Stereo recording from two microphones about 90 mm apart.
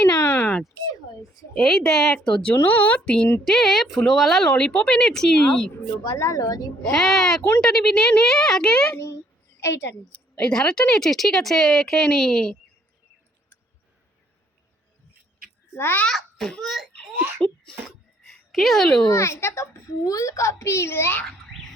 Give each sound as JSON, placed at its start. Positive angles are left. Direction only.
{"t": 0.0, "sound": "a sound", "side_deg": 30}
{"t": 1.5, "sound": "speech", "side_deg": 5}
{"t": 5.7, "sound": "a child's voice", "side_deg": 35}
{"t": 6.9, "sound": "speech", "side_deg": 0}
{"t": 9.6, "sound": "a woman's voice", "side_deg": 30}
{"t": 10.3, "sound": "speech", "side_deg": 10}
{"t": 15.7, "sound": "a child's voice", "side_deg": 25}
{"t": 16.0, "sound": "a child's voice", "side_deg": 5}
{"t": 17.2, "sound": "speech", "side_deg": -25}
{"t": 17.8, "sound": "a sound", "side_deg": 0}
{"t": 19.1, "sound": "a child's voice", "side_deg": 30}